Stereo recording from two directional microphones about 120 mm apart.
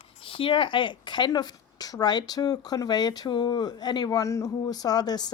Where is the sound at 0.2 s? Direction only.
45° left (ahead or behind).